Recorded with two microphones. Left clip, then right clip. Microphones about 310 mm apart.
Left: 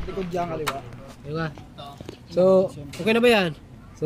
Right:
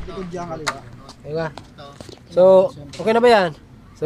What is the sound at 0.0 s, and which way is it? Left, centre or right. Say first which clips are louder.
Speech: left 2 dB; centre.